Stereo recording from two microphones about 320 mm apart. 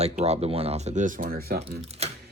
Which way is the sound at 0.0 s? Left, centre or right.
Centre.